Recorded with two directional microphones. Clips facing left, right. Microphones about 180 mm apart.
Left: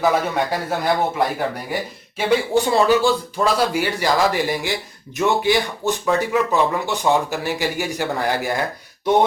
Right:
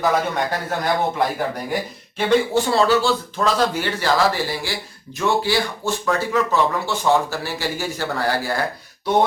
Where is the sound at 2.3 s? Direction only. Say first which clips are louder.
Even; 15° left (ahead or behind).